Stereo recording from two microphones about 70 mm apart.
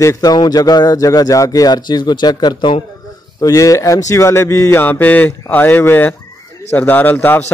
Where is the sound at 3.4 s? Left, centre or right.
Left.